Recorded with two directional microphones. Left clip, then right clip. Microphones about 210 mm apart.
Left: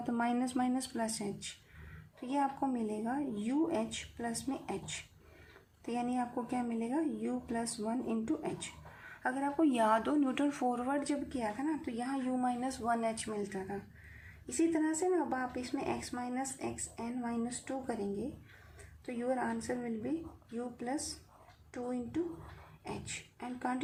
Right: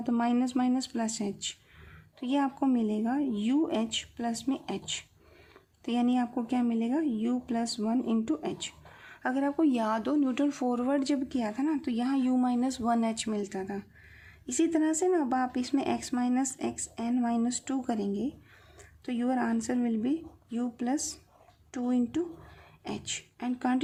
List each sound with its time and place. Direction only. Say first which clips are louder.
0.0 s a woman's voice: right 5 dB; 30° right (ahead or behind)